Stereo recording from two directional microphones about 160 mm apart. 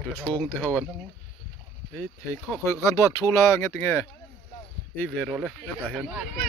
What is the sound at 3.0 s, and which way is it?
Speech, 20° left (ahead or behind).